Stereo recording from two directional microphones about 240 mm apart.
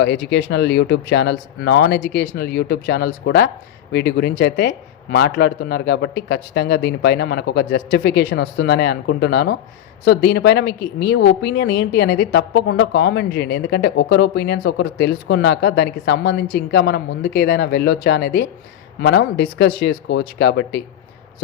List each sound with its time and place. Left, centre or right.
0.0 s a woman's voice: left